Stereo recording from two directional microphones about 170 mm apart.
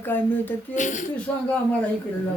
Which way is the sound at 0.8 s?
45° left (ahead or behind).